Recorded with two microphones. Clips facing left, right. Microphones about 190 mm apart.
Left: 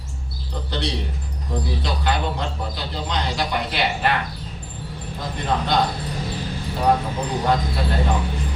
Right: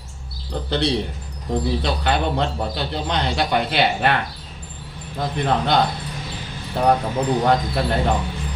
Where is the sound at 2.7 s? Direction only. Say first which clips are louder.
Right 3 dB; 60° right (ahead or behind).